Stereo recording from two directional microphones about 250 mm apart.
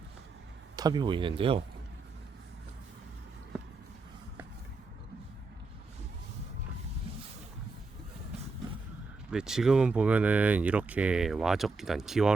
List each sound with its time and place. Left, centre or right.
0.8 s speech: centre
9.3 s speech: centre